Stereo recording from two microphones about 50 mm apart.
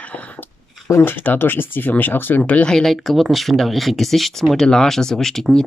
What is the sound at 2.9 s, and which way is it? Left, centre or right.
Speech, centre.